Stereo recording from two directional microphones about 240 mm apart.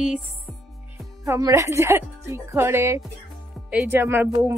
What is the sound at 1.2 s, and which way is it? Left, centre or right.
Speech, centre.